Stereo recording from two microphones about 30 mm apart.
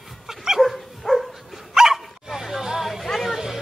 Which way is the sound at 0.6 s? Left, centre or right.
Centre.